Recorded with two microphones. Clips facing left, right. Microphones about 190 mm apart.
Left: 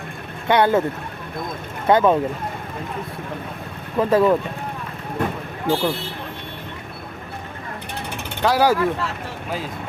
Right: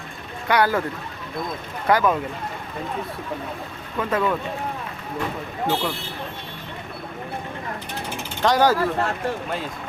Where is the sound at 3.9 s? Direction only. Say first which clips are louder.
Left 7 dB; 35° left (ahead or behind).